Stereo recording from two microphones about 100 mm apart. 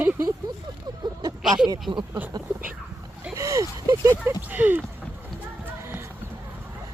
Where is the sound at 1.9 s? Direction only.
50° right (ahead or behind).